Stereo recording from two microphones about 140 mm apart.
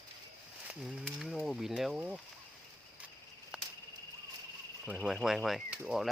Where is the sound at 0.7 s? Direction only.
5° right (ahead or behind).